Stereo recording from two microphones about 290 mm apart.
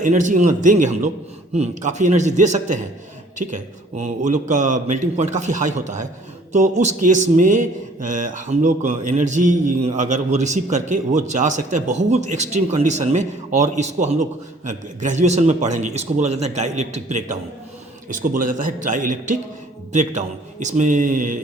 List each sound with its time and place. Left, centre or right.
0.0 s speech: right